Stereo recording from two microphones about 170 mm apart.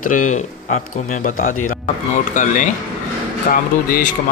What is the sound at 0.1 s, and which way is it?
Speech, 50° left (ahead or behind).